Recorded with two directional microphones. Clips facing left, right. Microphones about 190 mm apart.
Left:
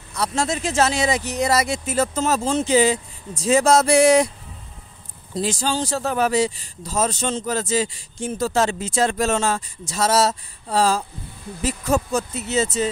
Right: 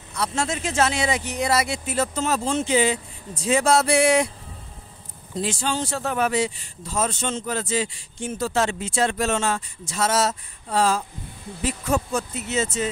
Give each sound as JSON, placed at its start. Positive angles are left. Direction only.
{"t": 0.2, "sound": "speech", "side_deg": 40}
{"t": 5.3, "sound": "speech", "side_deg": 40}